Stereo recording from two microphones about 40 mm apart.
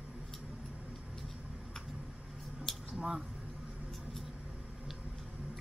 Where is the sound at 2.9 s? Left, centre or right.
Right.